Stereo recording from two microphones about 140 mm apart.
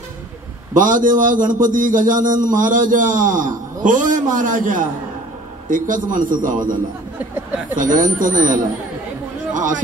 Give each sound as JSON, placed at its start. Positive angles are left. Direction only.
{"t": 0.7, "sound": "a man's voice", "side_deg": -70}
{"t": 7.7, "sound": "a man's voice", "side_deg": -70}
{"t": 9.5, "sound": "a sound", "side_deg": -65}